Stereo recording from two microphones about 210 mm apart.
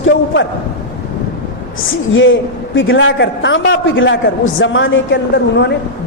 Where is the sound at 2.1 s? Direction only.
65° left (ahead or behind).